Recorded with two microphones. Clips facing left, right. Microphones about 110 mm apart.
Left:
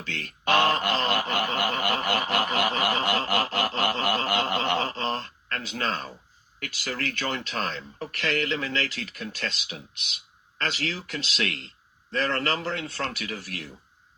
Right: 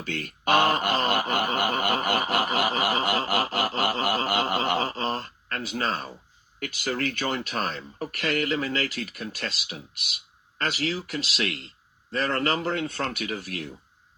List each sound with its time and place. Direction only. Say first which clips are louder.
0.0 s speech: right 2 dB; 15° right (ahead or behind)
6.7 s speech: right 4 dB; 20° right (ahead or behind)